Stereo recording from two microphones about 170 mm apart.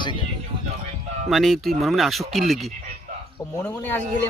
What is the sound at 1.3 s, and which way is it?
Speech, centre (ahead or behind).